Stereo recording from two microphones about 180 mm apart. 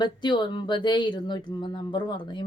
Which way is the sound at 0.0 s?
25° left (ahead or behind).